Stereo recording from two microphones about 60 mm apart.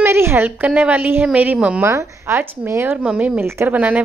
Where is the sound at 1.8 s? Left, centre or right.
Right.